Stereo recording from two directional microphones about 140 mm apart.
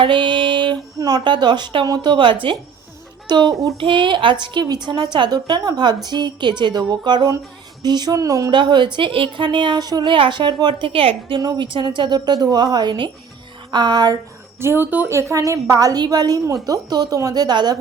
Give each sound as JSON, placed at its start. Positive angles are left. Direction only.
{"t": 0.0, "sound": "a woman's voice", "side_deg": -35}
{"t": 11.3, "sound": "a woman's voice", "side_deg": -30}
{"t": 14.6, "sound": "a woman's voice", "side_deg": -15}